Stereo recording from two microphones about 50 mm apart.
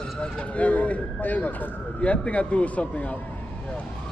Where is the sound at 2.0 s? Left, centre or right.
Left.